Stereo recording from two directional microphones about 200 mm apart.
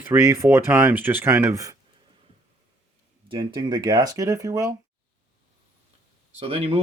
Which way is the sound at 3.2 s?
20° right (ahead or behind).